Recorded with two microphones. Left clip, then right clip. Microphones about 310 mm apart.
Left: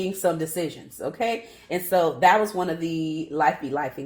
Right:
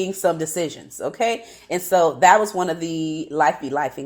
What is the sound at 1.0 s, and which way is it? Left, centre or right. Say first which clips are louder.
Speech: right 4 dB; right.